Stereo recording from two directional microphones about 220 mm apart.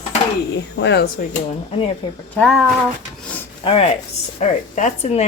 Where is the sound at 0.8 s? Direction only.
50° left (ahead or behind).